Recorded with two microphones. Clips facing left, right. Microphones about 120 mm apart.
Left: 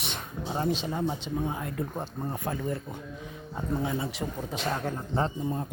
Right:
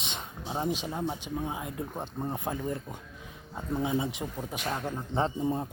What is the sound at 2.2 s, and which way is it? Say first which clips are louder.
Speech: even; 20° right (ahead or behind).